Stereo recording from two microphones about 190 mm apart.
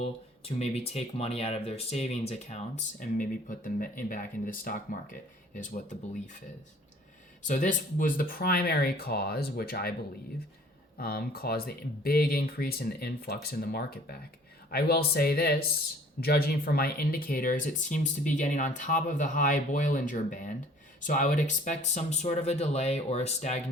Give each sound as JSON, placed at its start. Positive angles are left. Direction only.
{"t": 0.0, "sound": "speech", "side_deg": 30}
{"t": 7.4, "sound": "speech", "side_deg": 40}
{"t": 10.9, "sound": "speech", "side_deg": 50}